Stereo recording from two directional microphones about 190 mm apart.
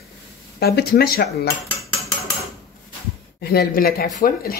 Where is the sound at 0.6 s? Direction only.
55° left (ahead or behind).